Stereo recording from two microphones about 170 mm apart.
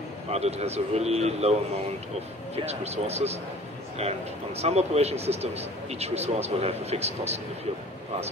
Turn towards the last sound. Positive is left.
turn(degrees=-40)  # may be behind; listen again after turning